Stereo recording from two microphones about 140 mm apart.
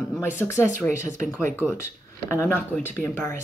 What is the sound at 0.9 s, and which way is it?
Speech, 60° right (ahead or behind).